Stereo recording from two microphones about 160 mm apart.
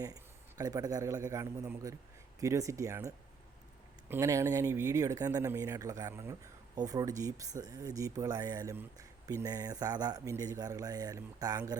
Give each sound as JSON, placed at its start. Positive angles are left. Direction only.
{"t": 0.0, "sound": "a man's voice", "side_deg": -20}
{"t": 4.1, "sound": "speech", "side_deg": -20}
{"t": 8.7, "sound": "speech", "side_deg": -15}
{"t": 9.2, "sound": "speech", "side_deg": -25}